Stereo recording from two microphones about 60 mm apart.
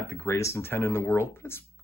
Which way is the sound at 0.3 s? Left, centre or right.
Left.